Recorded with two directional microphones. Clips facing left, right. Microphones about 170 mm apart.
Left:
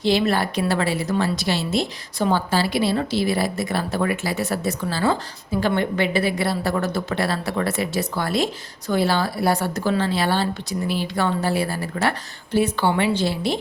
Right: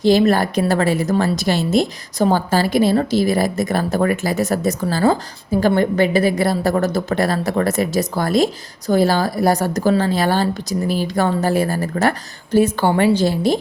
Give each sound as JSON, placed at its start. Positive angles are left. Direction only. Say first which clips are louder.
{"t": 0.0, "sound": "a woman's voice", "louder": "right 6 dB", "side_deg": -45}